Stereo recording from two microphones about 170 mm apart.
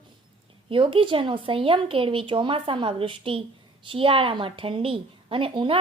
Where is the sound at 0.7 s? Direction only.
30° right (ahead or behind).